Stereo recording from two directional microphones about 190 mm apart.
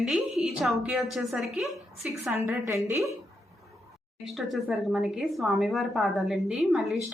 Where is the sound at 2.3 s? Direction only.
10° right (ahead or behind).